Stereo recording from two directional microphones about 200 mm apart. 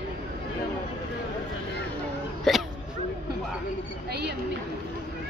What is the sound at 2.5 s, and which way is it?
Speech, centre (ahead or behind).